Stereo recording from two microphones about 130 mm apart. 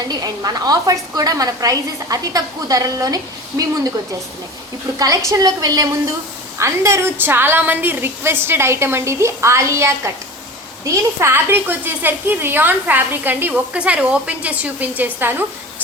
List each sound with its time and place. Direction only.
0.1 s a woman's voice: 30° right (ahead or behind)
4.9 s a woman's voice: 25° right (ahead or behind)